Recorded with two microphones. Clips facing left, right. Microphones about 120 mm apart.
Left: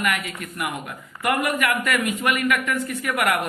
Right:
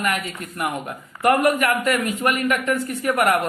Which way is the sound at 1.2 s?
40° right (ahead or behind).